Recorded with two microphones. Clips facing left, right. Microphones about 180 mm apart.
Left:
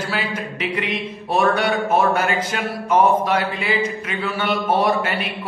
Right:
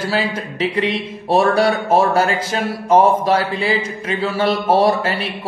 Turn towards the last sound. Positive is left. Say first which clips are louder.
# right 4 dB
turn(degrees=-35)  # may be behind; listen again after turning